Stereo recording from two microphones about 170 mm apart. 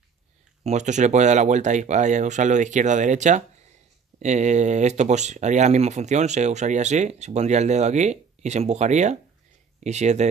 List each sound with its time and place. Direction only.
0.7 s speech: 45° right (ahead or behind)